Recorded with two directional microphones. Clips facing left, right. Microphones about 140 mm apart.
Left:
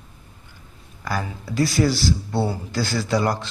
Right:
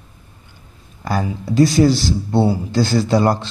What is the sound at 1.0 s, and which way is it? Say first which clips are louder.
A man's voice: right 6 dB; 25° right (ahead or behind).